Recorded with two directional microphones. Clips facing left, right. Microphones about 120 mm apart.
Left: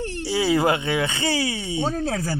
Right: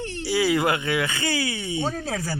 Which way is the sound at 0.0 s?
40° left (ahead or behind).